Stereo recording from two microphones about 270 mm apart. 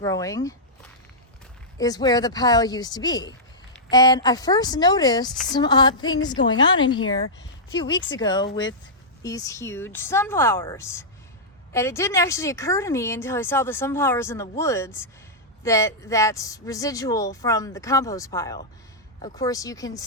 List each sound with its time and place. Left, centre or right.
0.0 s speech: centre
1.8 s speech: centre